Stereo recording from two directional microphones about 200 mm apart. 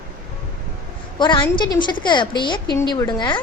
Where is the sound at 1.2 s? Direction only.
25° left (ahead or behind).